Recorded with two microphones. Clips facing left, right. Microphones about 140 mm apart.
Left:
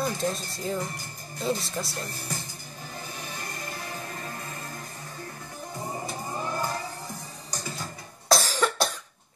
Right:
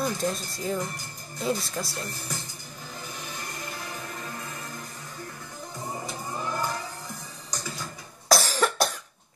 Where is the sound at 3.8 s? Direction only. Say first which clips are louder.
Left 1 dB; 30° left (ahead or behind).